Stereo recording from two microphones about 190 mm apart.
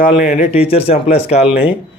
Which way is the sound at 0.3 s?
35° left (ahead or behind).